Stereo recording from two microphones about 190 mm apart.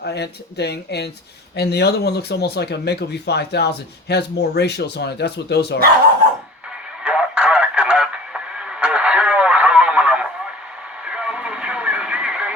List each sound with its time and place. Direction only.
0.0 s speech: 60° left (ahead or behind)
7.0 s radio: 5° right (ahead or behind)